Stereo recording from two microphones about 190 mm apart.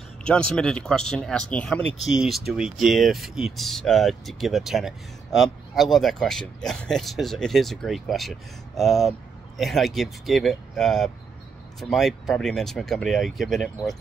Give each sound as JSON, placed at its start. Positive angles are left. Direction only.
{"t": 0.2, "sound": "speech", "side_deg": 5}